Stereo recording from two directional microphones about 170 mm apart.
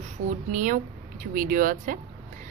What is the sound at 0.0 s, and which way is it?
A woman's voice, 45° right (ahead or behind).